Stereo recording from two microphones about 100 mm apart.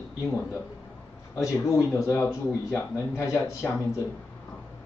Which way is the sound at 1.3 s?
25° left (ahead or behind).